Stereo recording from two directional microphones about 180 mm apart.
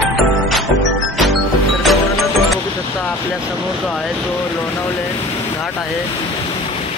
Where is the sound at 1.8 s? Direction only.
Centre (ahead or behind).